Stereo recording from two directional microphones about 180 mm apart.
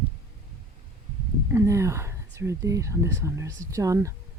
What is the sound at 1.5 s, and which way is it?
Speech, 15° right (ahead or behind).